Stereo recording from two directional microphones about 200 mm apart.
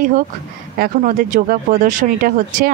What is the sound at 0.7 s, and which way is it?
Speech, 45° right (ahead or behind).